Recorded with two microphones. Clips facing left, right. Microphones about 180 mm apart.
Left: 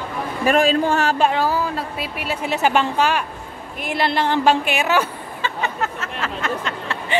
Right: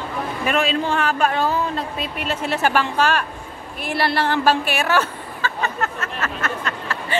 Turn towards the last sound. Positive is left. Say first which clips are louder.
# left 1 dB
turn(degrees=15)  # may be behind; listen again after turning